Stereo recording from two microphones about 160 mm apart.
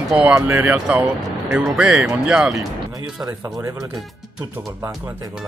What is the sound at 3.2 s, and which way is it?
Speech, 20° right (ahead or behind).